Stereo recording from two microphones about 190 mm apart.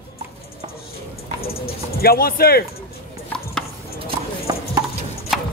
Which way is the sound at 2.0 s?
55° left (ahead or behind).